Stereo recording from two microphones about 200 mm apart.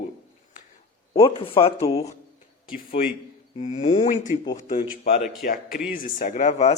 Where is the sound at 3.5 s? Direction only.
35° left (ahead or behind).